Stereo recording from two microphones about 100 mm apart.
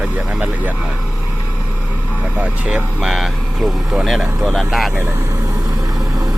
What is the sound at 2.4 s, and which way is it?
Speech, 10° right (ahead or behind).